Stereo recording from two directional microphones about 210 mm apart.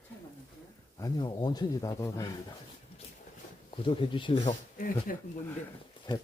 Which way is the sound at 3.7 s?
25° left (ahead or behind).